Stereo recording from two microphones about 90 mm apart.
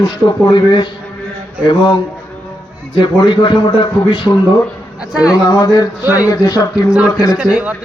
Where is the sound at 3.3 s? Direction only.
65° left (ahead or behind).